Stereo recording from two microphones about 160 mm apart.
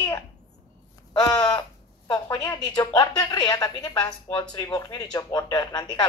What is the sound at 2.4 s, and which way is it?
Speech, 5° left (ahead or behind).